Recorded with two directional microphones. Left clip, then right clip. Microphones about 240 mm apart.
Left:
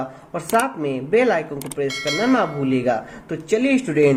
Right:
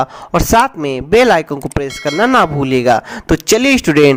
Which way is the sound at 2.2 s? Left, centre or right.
Right.